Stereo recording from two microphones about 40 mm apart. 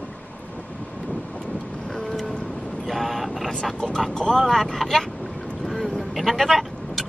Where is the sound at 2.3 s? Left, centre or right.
Left.